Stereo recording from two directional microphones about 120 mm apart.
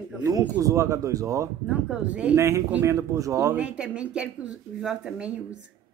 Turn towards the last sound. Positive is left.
turn(degrees=-5)  # may be behind; listen again after turning